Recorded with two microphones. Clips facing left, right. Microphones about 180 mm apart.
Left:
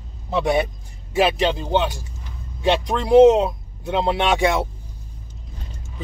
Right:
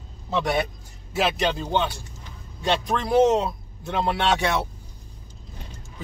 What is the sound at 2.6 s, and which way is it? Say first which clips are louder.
Speech: left 4 dB; 15° left (ahead or behind).